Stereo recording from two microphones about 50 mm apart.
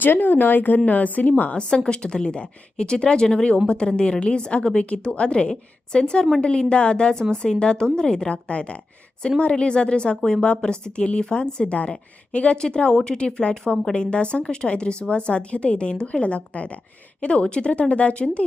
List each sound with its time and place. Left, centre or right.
0.0 s a woman's voice: left